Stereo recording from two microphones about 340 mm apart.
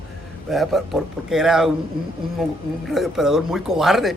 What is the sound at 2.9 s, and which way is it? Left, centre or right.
A man's voice, centre.